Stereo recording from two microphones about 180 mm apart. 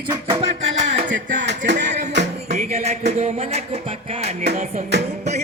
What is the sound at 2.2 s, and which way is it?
Music, 75° right (ahead or behind).